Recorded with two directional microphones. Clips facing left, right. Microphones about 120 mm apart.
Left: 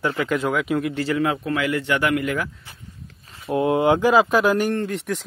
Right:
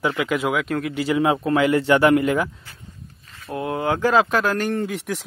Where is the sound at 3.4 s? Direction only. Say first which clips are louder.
Left 5 dB; 20° left (ahead or behind).